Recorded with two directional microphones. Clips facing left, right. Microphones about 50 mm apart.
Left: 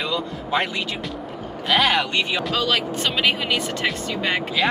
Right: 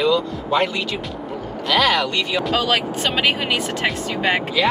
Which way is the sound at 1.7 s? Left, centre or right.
Left.